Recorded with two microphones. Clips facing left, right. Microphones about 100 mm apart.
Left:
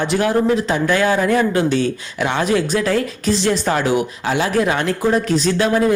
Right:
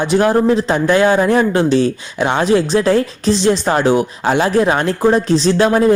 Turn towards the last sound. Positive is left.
turn(degrees=-30)  # may be behind; listen again after turning